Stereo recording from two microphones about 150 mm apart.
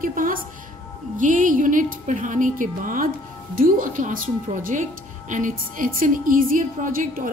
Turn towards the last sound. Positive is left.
turn(degrees=-65)  # may be behind; listen again after turning